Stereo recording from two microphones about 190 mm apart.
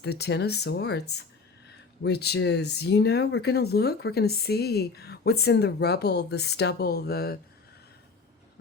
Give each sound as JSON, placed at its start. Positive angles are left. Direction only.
{"t": 0.0, "sound": "speech", "side_deg": 60}